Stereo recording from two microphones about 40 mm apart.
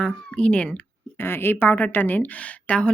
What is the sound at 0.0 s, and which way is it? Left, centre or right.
Speech, left.